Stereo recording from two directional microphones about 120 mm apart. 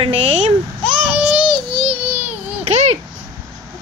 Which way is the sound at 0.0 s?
50° right (ahead or behind).